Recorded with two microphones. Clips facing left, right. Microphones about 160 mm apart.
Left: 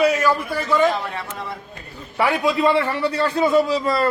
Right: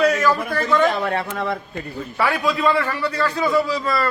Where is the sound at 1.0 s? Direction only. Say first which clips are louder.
Right 7 dB; 65° right (ahead or behind).